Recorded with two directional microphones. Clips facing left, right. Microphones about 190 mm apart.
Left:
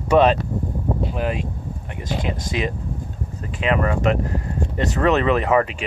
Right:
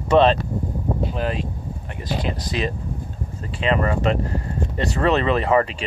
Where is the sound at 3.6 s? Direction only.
10° left (ahead or behind).